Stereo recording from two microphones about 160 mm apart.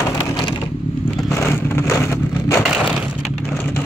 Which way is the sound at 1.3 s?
15° left (ahead or behind).